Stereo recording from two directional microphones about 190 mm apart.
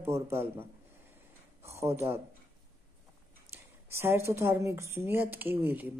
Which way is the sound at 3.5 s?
15° right (ahead or behind).